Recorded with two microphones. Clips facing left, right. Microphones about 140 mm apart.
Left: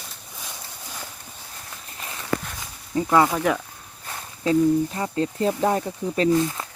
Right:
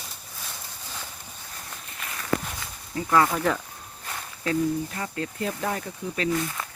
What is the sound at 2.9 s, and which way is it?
Speech, 20° left (ahead or behind).